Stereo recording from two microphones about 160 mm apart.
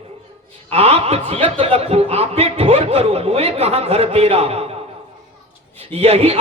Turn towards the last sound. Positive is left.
turn(degrees=-40)  # may be behind; listen again after turning